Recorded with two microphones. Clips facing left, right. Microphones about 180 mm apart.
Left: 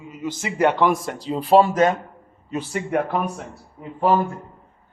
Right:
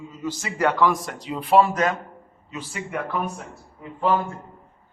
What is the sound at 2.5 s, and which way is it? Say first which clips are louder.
Speech: left 8 dB; 60° left (ahead or behind).